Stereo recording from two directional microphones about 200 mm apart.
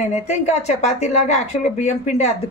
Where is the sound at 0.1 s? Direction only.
35° left (ahead or behind).